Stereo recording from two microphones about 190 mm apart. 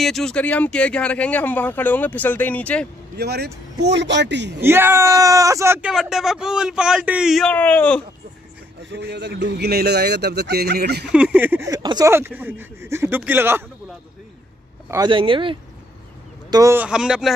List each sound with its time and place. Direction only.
0.0 s speech: centre (ahead or behind)
3.2 s speech: 60° right (ahead or behind)
4.6 s speech: 10° right (ahead or behind); by 8.0 s 10° left (ahead or behind)
8.9 s speech: 65° right (ahead or behind)
11.1 s speech: 5° right (ahead or behind)
14.9 s speech: 25° right (ahead or behind); by 17.3 s 5° right (ahead or behind)